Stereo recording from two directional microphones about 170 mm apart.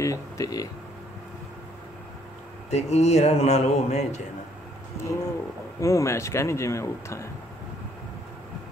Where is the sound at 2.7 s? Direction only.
40° left (ahead or behind).